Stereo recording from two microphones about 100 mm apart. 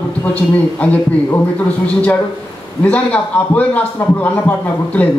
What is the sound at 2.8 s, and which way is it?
Speech, 15° left (ahead or behind).